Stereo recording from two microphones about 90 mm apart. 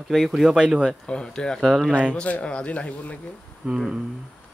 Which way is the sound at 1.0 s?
10° left (ahead or behind).